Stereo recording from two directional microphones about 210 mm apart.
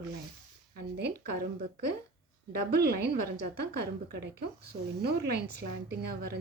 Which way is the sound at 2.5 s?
50° right (ahead or behind).